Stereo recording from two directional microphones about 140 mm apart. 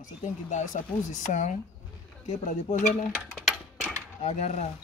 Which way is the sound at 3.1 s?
Centre (ahead or behind).